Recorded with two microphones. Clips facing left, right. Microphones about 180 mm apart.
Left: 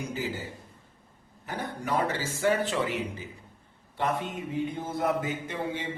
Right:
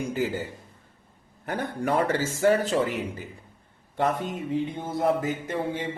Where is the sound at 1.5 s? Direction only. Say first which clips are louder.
Right 5 dB; 50° right (ahead or behind).